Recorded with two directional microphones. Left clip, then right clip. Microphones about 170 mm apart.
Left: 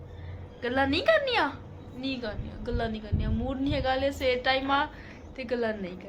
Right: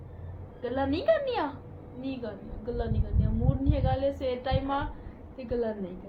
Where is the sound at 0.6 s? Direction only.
15° left (ahead or behind).